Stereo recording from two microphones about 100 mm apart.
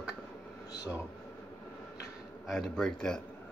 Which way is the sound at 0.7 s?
40° left (ahead or behind).